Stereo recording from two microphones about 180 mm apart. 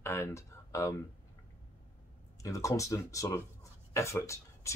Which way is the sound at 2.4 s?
15° left (ahead or behind).